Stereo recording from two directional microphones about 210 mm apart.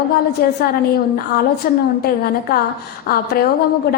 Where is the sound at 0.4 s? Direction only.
45° left (ahead or behind).